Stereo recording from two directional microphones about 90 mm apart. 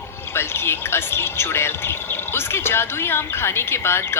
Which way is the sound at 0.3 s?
25° left (ahead or behind).